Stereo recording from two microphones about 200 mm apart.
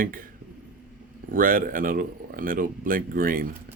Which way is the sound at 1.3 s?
45° right (ahead or behind).